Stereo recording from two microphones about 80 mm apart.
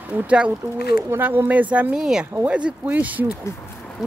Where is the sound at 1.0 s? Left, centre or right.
Right.